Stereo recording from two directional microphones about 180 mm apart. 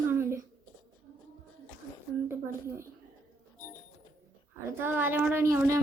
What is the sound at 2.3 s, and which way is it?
Speech, 15° right (ahead or behind).